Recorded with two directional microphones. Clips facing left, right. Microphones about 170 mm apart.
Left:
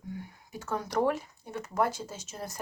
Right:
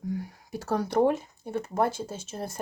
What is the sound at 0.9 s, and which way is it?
Speech, 25° right (ahead or behind).